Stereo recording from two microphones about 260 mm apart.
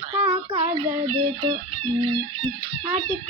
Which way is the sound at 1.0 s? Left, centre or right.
Centre.